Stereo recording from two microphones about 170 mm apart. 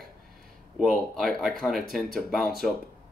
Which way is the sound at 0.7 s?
Centre (ahead or behind).